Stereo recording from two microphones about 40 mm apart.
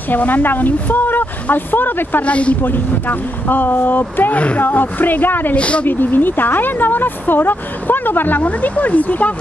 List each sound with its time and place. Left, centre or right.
0.1 s speech: left
2.2 s speech: left
2.6 s speech: left
5.6 s speech: left
5.9 s speech: left